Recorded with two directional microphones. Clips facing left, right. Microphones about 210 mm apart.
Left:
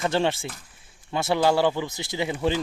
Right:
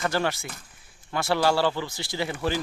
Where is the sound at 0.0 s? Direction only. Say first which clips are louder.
Left 3 dB; 25° left (ahead or behind).